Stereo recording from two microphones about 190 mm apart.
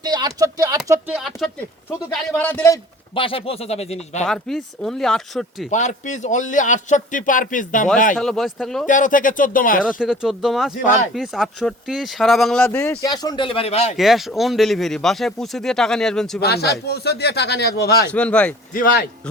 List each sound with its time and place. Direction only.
0.0 s speech: 20° right (ahead or behind)
0.9 s speech: 5° right (ahead or behind)
2.4 s speech: 10° left (ahead or behind)
3.2 s a man's voice: 30° left (ahead or behind)
4.3 s speech: centre (ahead or behind)
5.7 s a man's voice: 40° left (ahead or behind)
8.1 s speech: 5° left (ahead or behind)
8.9 s speech: 45° left (ahead or behind)
10.0 s speech: 5° right (ahead or behind); by 13.1 s 10° left (ahead or behind)
13.1 s speech: 25° left (ahead or behind)
13.9 s speech: centre (ahead or behind)
16.4 s speech: 60° left (ahead or behind)
18.1 s speech: 5° left (ahead or behind)
18.7 s speech: 50° left (ahead or behind)